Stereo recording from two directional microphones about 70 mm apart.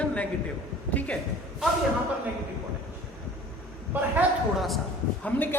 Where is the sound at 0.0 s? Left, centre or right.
Centre.